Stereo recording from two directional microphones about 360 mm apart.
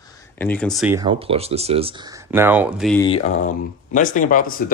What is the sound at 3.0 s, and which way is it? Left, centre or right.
Speech, centre.